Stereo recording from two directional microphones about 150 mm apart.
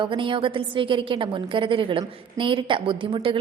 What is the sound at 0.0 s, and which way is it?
A woman's voice, 35° right (ahead or behind).